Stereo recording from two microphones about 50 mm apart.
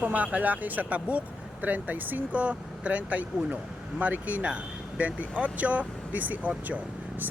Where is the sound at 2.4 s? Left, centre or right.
Right.